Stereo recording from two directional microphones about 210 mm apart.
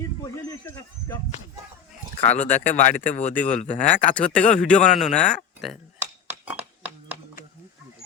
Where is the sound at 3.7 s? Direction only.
5° left (ahead or behind).